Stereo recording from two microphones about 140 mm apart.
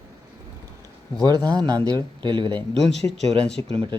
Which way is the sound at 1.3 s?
30° right (ahead or behind).